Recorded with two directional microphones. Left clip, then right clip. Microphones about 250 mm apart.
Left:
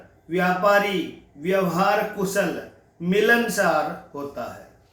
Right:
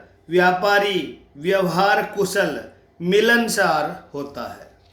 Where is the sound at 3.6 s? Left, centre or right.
Right.